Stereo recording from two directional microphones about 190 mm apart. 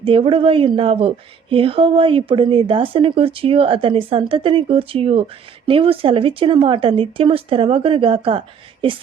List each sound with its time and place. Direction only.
0.0 s speech: 30° right (ahead or behind)